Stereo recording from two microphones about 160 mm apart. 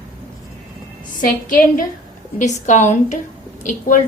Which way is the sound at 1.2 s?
60° left (ahead or behind).